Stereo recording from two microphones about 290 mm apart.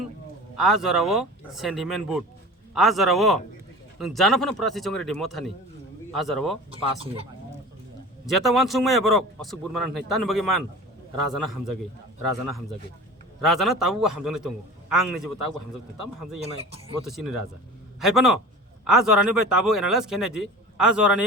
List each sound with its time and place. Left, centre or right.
0.5 s a man's voice: centre
6.7 s speech: centre
8.3 s a man's voice: centre
16.4 s speech: right
17.1 s a man's voice: centre